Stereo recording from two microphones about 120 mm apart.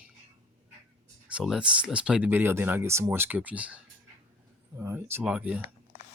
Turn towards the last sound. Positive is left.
turn(degrees=-10)  # may be behind; listen again after turning